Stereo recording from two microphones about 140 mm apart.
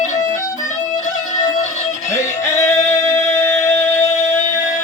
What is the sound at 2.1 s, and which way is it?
Music, 20° left (ahead or behind).